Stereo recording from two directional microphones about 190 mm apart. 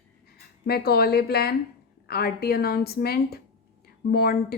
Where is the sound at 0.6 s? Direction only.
55° left (ahead or behind).